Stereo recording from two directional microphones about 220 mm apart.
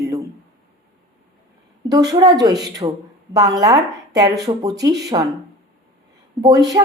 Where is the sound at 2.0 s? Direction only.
15° right (ahead or behind).